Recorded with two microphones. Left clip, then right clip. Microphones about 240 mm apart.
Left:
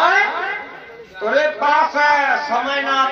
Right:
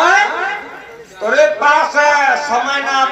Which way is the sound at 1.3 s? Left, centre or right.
Right.